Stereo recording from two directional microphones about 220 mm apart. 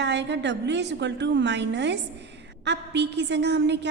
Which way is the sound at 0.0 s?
50° right (ahead or behind).